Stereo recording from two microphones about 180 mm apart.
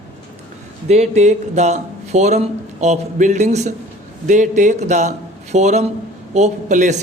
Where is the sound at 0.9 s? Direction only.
40° right (ahead or behind).